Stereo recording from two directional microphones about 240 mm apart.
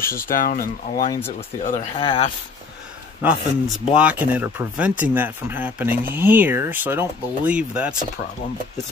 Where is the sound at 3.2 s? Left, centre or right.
Centre.